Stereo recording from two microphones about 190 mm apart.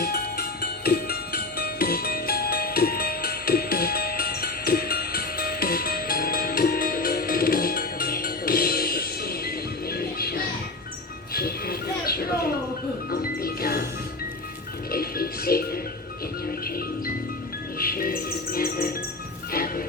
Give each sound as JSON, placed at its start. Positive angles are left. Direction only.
{"t": 0.0, "sound": "music", "side_deg": 55}
{"t": 14.9, "sound": "music", "side_deg": 50}
{"t": 17.7, "sound": "music", "side_deg": 50}